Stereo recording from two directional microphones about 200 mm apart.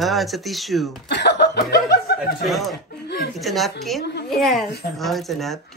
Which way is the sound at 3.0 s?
60° left (ahead or behind).